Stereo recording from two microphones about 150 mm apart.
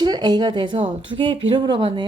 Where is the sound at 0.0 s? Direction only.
30° right (ahead or behind).